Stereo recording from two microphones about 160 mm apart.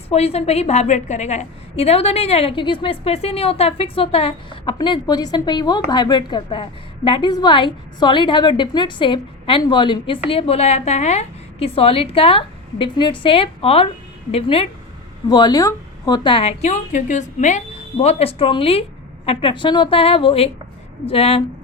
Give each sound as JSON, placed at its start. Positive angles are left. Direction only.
{"t": 0.1, "sound": "a woman's voice", "side_deg": 40}
{"t": 15.3, "sound": "a woman's voice", "side_deg": 25}